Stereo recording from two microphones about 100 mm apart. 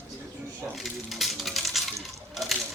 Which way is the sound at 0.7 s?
Centre (ahead or behind).